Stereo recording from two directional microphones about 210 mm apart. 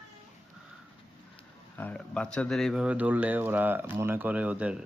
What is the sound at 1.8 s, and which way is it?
Speech, 5° left (ahead or behind).